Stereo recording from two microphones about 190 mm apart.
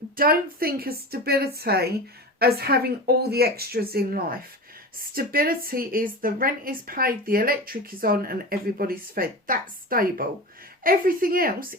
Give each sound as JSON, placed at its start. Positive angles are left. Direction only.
{"t": 0.2, "sound": "a woman's voice", "side_deg": -50}